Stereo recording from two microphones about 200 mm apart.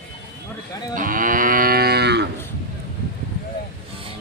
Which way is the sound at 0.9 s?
45° right (ahead or behind).